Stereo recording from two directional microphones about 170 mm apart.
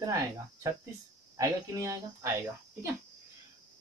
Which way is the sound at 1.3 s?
20° right (ahead or behind).